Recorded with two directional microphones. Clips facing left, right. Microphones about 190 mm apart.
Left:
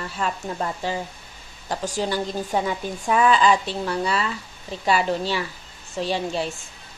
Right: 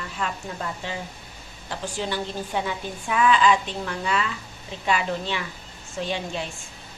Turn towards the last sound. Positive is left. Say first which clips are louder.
# left 4 dB
turn(degrees=35)  # may be behind; listen again after turning